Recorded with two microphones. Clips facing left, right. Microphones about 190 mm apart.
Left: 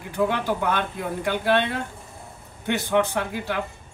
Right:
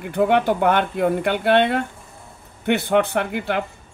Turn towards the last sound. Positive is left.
turn(degrees=-65)  # may be behind; listen again after turning